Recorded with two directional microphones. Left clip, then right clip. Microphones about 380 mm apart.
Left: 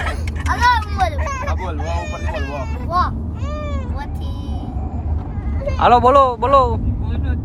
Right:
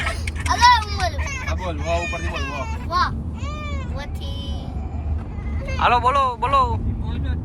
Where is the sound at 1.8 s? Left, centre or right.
Centre.